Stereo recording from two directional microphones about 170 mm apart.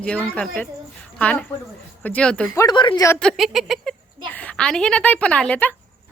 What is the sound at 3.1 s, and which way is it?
A child's voice, 5° left (ahead or behind).